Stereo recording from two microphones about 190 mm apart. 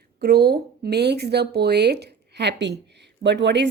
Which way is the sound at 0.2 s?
60° right (ahead or behind).